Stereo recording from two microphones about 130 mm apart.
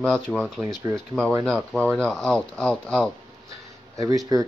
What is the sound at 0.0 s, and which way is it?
Speech, 5° left (ahead or behind).